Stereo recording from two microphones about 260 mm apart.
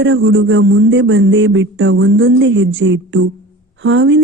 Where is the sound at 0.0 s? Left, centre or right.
Right.